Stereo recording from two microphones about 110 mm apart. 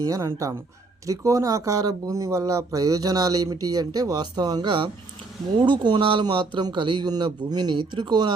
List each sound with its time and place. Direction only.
0.0 s speech: 30° right (ahead or behind)